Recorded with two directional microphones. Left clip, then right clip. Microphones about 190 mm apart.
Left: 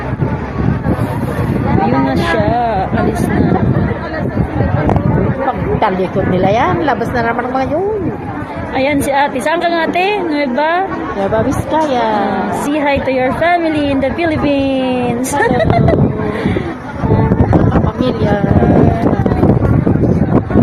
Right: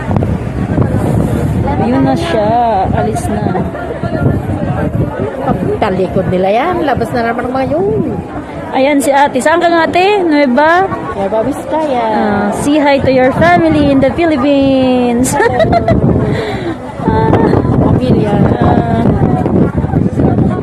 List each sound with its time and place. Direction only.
1.8 s a sound: 20° right (ahead or behind)
5.8 s a woman's voice: 35° right (ahead or behind)
8.8 s a woman's voice: 25° right (ahead or behind)
11.3 s a woman's voice: centre (ahead or behind)
12.2 s a woman's voice: 30° right (ahead or behind)